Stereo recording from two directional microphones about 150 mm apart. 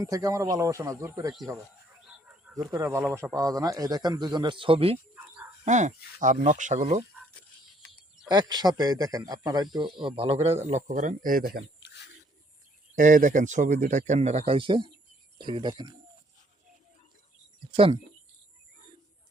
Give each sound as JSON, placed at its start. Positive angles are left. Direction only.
{"t": 0.0, "sound": "a man's voice", "side_deg": -25}
{"t": 2.0, "sound": "bird", "side_deg": -5}
{"t": 2.7, "sound": "a man's voice", "side_deg": -20}
{"t": 5.1, "sound": "a sound", "side_deg": -10}
{"t": 5.6, "sound": "speech", "side_deg": -50}
{"t": 8.3, "sound": "a man's voice", "side_deg": -30}
{"t": 10.2, "sound": "speech", "side_deg": -40}
{"t": 13.0, "sound": "a man's voice", "side_deg": -60}
{"t": 17.7, "sound": "speech", "side_deg": -40}